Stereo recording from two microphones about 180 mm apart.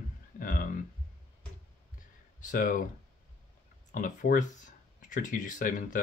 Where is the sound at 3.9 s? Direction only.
50° left (ahead or behind).